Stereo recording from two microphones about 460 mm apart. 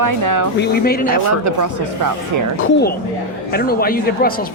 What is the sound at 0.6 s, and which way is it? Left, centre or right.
Speech, centre.